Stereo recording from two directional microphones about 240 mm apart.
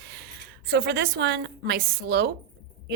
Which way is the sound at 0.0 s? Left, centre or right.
Right.